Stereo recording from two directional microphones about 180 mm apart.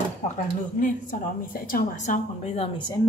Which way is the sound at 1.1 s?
45° left (ahead or behind).